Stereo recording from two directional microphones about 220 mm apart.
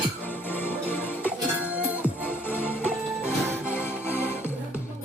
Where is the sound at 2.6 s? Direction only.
5° right (ahead or behind).